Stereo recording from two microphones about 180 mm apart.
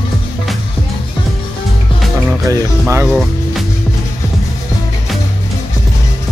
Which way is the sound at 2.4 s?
15° right (ahead or behind).